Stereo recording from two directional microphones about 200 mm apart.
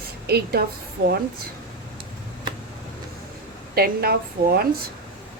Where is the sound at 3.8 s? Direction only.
50° right (ahead or behind).